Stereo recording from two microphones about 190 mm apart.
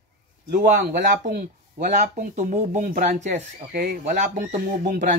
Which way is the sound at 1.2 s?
45° right (ahead or behind).